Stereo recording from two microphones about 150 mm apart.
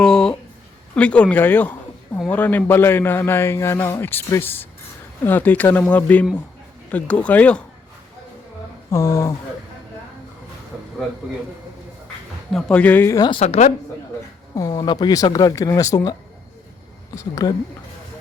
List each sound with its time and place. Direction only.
0.0 s a sound: 5° left (ahead or behind)
0.9 s speech: 10° left (ahead or behind)
8.9 s speech: 20° left (ahead or behind)
12.5 s speech: 5° left (ahead or behind)
13.1 s speech: 30° left (ahead or behind)
13.4 s a woman's voice: 45° left (ahead or behind)
14.5 s speech: 25° left (ahead or behind)
17.2 s speech: 25° left (ahead or behind)